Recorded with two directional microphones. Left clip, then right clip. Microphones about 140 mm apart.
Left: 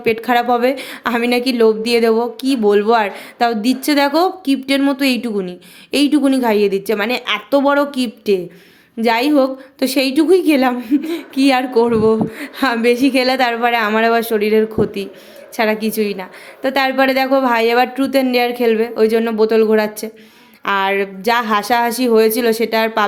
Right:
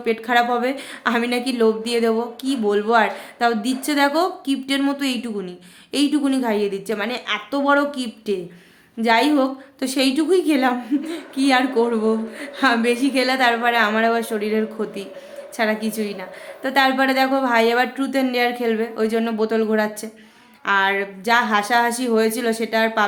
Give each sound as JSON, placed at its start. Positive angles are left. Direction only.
{"t": 0.0, "sound": "a woman's voice", "side_deg": 45}